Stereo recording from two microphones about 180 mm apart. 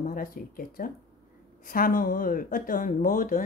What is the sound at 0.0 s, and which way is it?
Speech, 50° left (ahead or behind).